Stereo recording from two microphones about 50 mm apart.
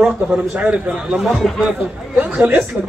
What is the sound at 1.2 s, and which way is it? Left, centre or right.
Speech, centre.